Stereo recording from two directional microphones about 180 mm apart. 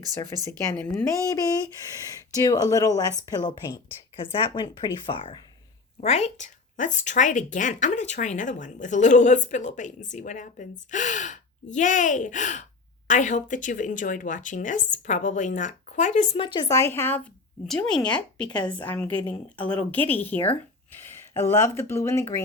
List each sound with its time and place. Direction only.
0.8 s a woman's voice: 5° left (ahead or behind)
2.3 s speech: 20° left (ahead or behind)
6.0 s speech: 35° left (ahead or behind)
16.4 s a woman's voice: 25° left (ahead or behind)